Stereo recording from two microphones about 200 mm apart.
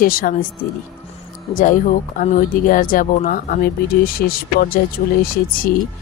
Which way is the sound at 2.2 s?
40° left (ahead or behind).